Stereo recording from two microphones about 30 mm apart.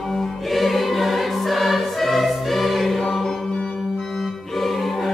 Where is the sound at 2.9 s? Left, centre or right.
Centre.